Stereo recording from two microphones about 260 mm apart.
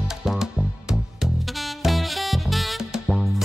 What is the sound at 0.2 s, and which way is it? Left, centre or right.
Music, centre.